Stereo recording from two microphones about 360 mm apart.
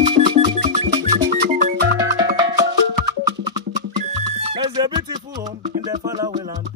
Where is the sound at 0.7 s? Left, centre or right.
Centre.